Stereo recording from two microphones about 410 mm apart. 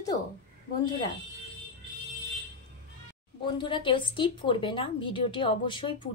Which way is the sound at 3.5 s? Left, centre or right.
Centre.